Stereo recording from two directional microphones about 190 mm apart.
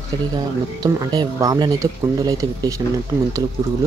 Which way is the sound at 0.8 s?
20° right (ahead or behind).